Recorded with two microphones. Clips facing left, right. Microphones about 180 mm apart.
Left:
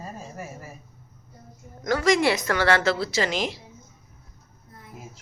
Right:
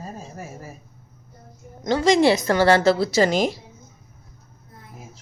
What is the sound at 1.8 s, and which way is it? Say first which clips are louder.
A woman's voice: right 4 dB; 25° right (ahead or behind).